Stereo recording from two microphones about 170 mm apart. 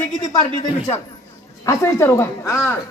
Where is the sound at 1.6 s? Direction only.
15° left (ahead or behind).